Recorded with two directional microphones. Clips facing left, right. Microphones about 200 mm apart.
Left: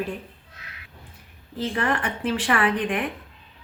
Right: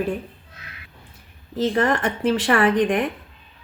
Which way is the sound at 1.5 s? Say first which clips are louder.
Right 5 dB; 40° right (ahead or behind).